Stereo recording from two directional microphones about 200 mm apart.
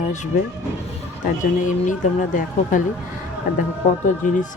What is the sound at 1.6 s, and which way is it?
Speech, 40° left (ahead or behind).